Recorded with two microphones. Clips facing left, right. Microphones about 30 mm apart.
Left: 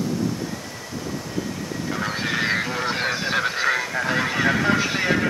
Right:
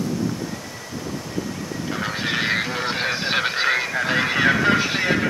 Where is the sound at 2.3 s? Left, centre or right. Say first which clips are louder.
Right 1 dB; right.